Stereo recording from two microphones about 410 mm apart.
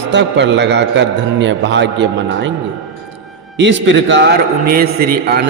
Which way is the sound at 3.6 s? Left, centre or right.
Right.